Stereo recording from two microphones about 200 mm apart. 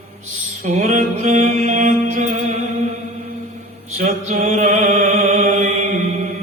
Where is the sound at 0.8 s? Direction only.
35° right (ahead or behind).